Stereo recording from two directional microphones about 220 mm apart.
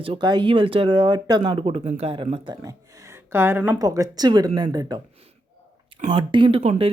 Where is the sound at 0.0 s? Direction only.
20° right (ahead or behind).